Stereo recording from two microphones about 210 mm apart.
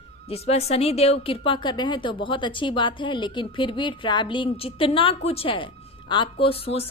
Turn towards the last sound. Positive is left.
turn(degrees=30)  # may be behind; listen again after turning